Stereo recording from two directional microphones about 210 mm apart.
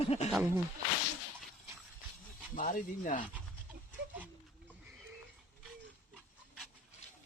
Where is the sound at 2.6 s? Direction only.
40° left (ahead or behind).